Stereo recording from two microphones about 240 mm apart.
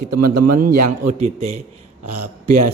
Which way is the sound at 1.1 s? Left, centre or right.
Right.